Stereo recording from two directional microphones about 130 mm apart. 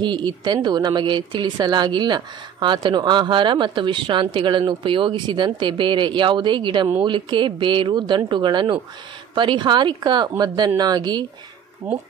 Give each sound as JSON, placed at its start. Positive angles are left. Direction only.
{"t": 0.0, "sound": "speech", "side_deg": -35}